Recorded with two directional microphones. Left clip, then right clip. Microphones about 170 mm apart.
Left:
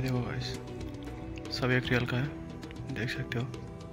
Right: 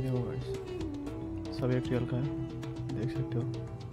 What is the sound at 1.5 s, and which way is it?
Speech, 10° right (ahead or behind).